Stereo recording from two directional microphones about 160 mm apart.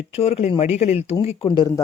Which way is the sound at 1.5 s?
20° left (ahead or behind).